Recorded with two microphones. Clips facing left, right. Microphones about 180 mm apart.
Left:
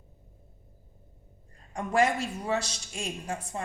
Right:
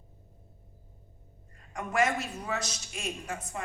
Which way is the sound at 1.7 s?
30° left (ahead or behind).